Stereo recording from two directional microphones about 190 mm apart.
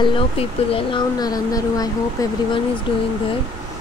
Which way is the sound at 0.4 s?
25° left (ahead or behind).